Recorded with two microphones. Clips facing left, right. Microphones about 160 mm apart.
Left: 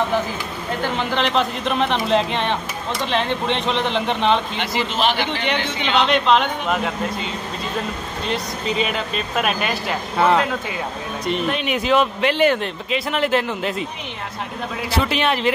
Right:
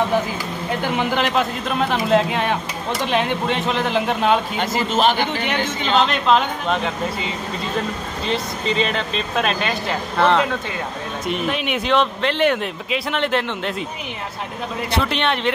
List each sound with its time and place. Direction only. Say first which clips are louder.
0.9 s speech: right 1 dB; 5° right (ahead or behind)
4.6 s speech: right 3 dB; 45° right (ahead or behind)
6.0 s speech: left 1 dB; centre (ahead or behind)